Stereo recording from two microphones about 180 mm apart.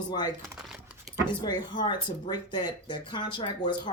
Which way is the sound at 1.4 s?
25° left (ahead or behind).